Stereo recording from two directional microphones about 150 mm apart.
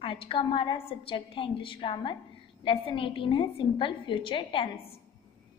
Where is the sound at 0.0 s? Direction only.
35° left (ahead or behind).